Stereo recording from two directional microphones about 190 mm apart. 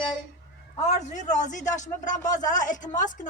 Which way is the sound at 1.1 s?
40° left (ahead or behind).